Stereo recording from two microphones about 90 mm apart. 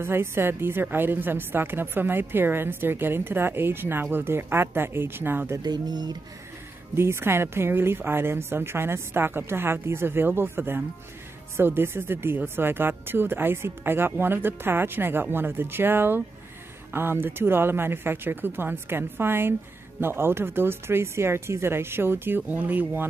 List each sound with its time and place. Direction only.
0.0 s a woman's voice: 25° right (ahead or behind)
5.6 s speech: 50° right (ahead or behind)
7.0 s a woman's voice: 30° right (ahead or behind)